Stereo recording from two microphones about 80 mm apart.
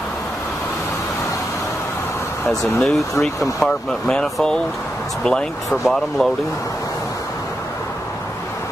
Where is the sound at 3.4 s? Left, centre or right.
Centre.